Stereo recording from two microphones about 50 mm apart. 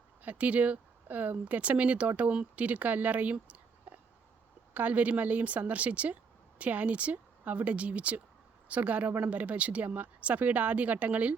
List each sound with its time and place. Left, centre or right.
0.2 s speech: right
3.4 s a sound: right
4.7 s speech: right